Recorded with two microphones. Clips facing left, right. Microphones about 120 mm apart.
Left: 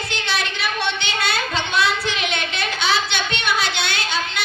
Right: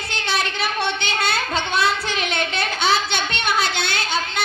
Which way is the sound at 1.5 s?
45° right (ahead or behind).